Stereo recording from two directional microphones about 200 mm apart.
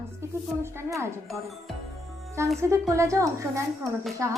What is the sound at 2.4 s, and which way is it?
Speech, 15° right (ahead or behind).